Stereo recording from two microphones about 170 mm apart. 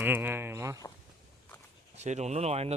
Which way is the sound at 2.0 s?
40° right (ahead or behind).